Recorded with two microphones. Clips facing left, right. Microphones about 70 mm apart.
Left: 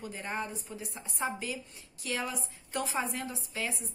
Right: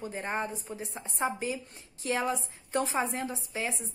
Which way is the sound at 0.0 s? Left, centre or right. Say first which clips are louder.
Right 3 dB; right.